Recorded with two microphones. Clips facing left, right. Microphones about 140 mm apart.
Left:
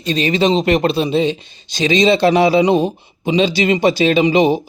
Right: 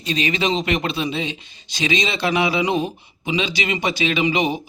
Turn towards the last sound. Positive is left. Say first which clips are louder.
# left 8 dB
turn(degrees=30)  # may be behind; listen again after turning